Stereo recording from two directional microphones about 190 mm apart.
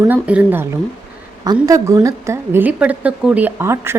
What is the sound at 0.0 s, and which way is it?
A woman's voice, 10° right (ahead or behind).